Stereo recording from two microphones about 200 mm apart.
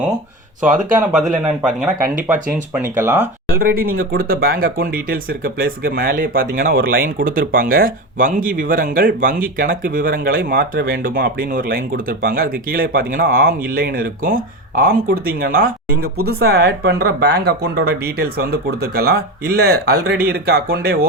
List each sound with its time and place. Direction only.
0.6 s speech: 40° right (ahead or behind)
3.0 s speech: 10° right (ahead or behind)
3.5 s speech: 50° right (ahead or behind)